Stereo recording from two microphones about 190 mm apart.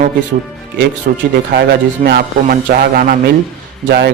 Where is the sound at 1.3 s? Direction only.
55° right (ahead or behind).